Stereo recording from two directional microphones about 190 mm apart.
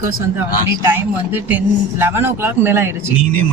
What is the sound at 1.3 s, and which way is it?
Speech, 10° right (ahead or behind).